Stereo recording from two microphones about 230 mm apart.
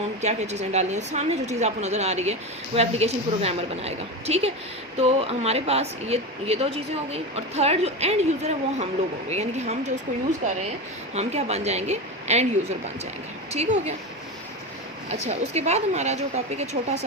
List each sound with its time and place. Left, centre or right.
0.2 s a woman's voice: right
11.1 s a woman's voice: right
15.1 s a woman's voice: right